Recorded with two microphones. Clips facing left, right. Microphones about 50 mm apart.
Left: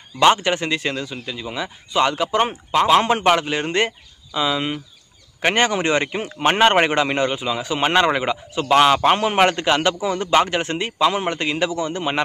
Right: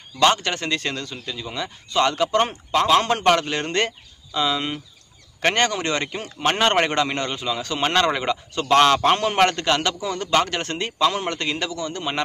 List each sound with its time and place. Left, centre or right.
0.2 s speech: centre